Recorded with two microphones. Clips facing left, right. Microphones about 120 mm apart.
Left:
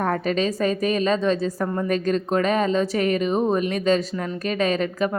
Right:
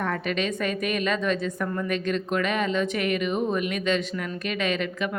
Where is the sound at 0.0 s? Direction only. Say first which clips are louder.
Left 5 dB; 35° left (ahead or behind).